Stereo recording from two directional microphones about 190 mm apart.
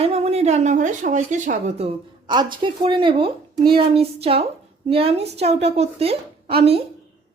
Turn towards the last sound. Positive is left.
turn(degrees=-30)  # may be behind; listen again after turning